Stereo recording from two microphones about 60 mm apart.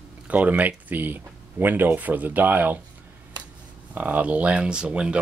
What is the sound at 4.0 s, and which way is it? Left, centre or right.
Speech, right.